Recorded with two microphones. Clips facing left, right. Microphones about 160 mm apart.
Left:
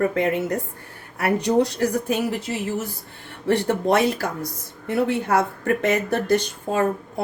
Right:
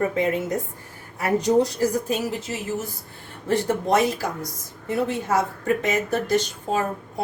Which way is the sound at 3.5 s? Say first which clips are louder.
Left 2 dB; 65° left (ahead or behind).